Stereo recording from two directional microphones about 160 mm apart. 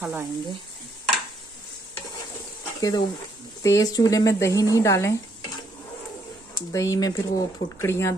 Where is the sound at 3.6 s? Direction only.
20° left (ahead or behind).